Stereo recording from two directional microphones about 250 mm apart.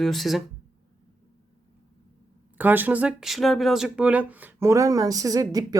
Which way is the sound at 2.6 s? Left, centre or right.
Centre.